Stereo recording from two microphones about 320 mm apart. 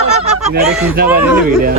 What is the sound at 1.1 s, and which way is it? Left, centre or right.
Speech, centre.